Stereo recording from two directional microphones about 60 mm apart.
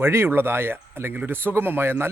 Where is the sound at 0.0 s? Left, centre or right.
Right.